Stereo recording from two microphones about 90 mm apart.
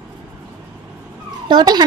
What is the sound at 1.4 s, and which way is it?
Speech, 55° right (ahead or behind).